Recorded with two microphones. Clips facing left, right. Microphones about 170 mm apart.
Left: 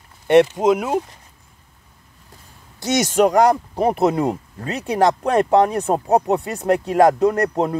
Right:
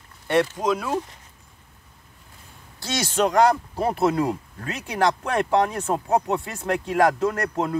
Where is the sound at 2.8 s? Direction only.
20° left (ahead or behind).